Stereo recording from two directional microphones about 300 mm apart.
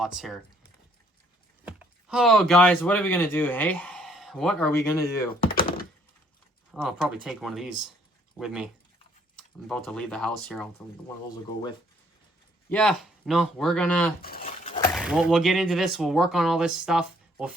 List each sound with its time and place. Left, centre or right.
0.0 s speech: centre
1.6 s speech: centre
6.7 s speech: centre
12.6 s speech: centre
14.2 s a sound: left
14.9 s speech: centre